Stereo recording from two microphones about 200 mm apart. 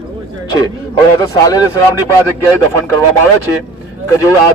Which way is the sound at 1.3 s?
20° left (ahead or behind).